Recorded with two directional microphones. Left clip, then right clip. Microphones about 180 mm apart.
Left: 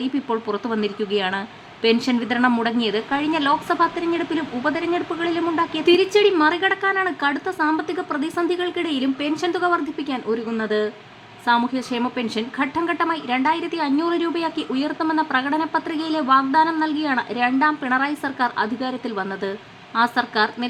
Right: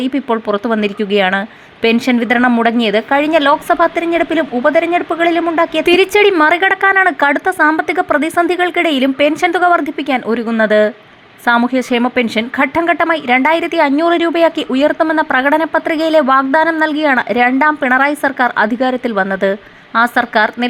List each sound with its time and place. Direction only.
0.1 s a woman's voice: 20° right (ahead or behind)